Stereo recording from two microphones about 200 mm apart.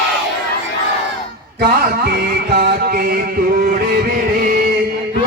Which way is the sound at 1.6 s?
50° right (ahead or behind).